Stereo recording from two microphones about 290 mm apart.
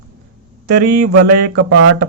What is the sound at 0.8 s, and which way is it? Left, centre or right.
Speech, right.